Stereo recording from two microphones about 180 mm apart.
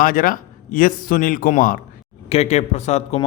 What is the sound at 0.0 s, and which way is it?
Speech, 50° left (ahead or behind).